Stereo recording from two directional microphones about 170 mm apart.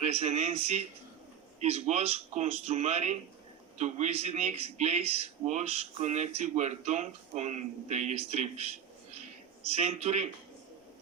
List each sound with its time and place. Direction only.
0.0 s speech: 40° right (ahead or behind)